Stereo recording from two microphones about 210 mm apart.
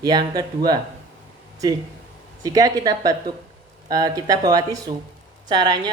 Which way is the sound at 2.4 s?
15° right (ahead or behind).